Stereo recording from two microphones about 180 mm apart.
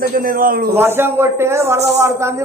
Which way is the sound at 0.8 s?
10° right (ahead or behind).